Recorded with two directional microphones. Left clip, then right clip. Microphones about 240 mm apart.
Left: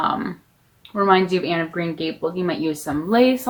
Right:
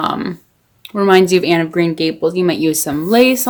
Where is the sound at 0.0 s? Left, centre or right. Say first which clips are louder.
Right 3 dB; right.